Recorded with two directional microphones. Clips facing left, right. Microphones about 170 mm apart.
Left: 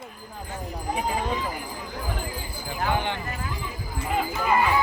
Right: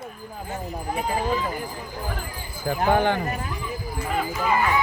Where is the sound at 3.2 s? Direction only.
20° right (ahead or behind).